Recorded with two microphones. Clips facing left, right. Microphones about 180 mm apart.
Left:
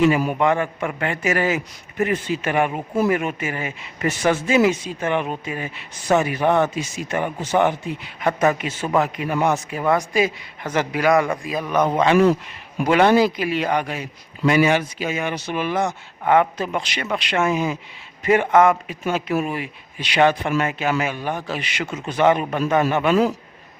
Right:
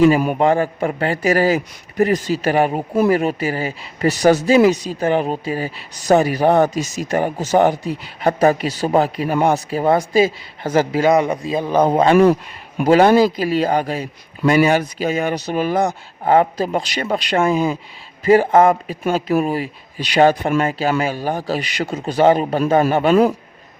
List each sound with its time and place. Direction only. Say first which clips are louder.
0.3 s speech: right 4 dB; 35° right (ahead or behind)